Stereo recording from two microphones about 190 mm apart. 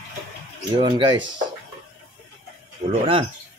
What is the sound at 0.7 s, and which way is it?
Speech, 25° right (ahead or behind).